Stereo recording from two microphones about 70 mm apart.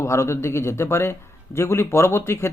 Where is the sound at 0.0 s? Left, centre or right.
Left.